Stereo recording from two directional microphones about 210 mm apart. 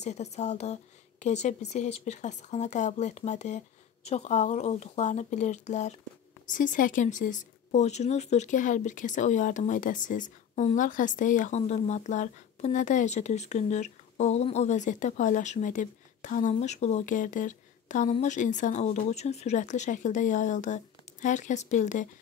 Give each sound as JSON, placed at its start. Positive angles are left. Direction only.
{"t": 0.0, "sound": "speech", "side_deg": 35}